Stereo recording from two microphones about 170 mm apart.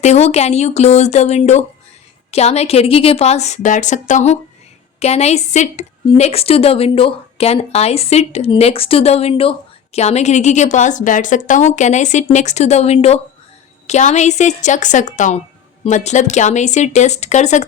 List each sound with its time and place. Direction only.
0.0 s a woman's voice: 40° left (ahead or behind)